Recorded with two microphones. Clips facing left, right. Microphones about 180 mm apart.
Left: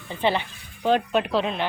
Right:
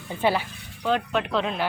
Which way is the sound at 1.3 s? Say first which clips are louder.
Left 1 dB; centre (ahead or behind).